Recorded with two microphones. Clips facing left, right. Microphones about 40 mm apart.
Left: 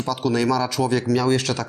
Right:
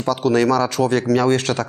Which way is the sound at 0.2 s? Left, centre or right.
Right.